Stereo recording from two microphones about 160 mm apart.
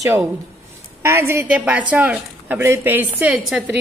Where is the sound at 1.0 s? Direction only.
15° right (ahead or behind).